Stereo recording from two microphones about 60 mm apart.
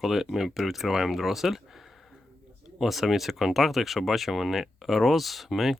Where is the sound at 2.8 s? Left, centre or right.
Centre.